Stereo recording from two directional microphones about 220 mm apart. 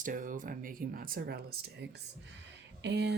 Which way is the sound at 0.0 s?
35° right (ahead or behind).